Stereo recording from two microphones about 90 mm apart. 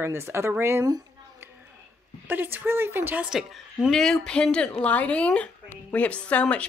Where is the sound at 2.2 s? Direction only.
25° right (ahead or behind).